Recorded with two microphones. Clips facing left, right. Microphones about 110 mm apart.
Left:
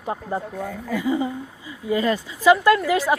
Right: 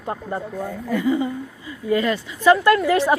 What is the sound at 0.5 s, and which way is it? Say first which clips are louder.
Speech: right 2 dB; 5° right (ahead or behind).